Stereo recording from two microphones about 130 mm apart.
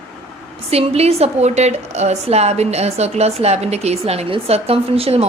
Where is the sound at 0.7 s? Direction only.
55° right (ahead or behind).